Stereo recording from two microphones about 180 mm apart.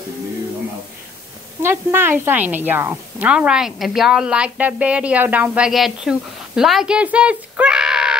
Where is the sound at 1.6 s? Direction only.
15° right (ahead or behind).